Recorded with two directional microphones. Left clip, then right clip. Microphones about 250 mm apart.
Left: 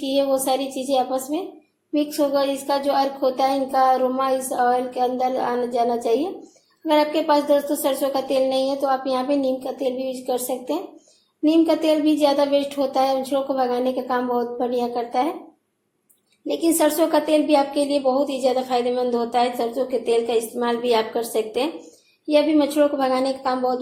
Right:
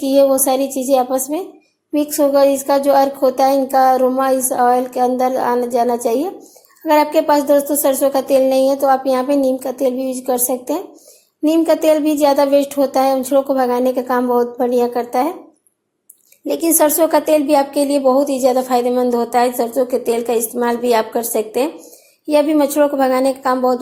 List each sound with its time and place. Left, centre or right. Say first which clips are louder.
0.0 s a woman's voice: right 8 dB; right
16.5 s a woman's voice: right 5 dB; right